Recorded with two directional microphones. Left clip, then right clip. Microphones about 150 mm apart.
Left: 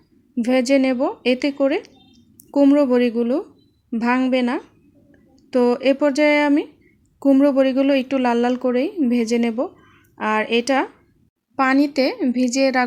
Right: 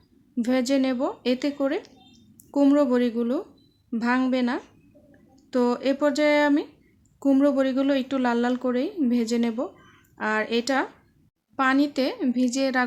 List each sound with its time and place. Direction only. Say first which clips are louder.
0.3 s a woman's voice: left 6 dB; 20° left (ahead or behind)